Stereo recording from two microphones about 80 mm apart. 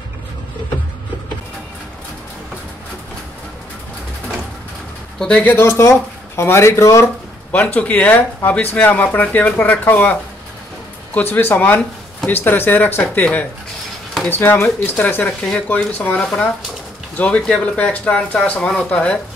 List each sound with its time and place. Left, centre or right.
5.2 s speech: centre
5.5 s speech: left
7.5 s speech: centre
11.1 s speech: left